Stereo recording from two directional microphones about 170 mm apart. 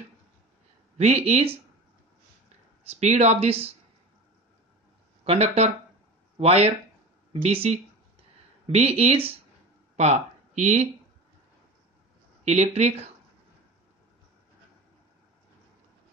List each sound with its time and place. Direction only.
0.9 s speech: 40° right (ahead or behind)
2.9 s speech: 40° right (ahead or behind)
5.2 s speech: 35° right (ahead or behind)
12.4 s speech: 40° right (ahead or behind)